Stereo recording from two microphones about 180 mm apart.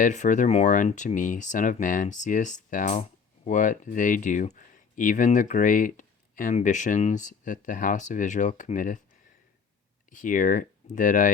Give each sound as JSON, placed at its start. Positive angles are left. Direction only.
{"t": 0.0, "sound": "speech", "side_deg": 45}
{"t": 10.1, "sound": "speech", "side_deg": 45}